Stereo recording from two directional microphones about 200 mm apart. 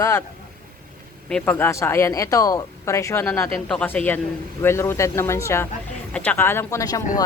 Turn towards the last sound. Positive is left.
turn(degrees=20)  # may be behind; listen again after turning